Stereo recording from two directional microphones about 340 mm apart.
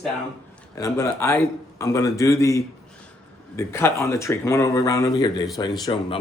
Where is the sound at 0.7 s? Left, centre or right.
Centre.